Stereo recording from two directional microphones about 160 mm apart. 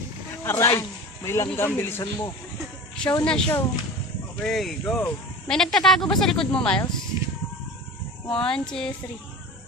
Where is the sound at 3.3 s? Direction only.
5° left (ahead or behind).